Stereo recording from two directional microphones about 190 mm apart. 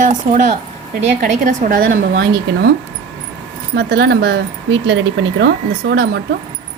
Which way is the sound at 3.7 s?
60° right (ahead or behind).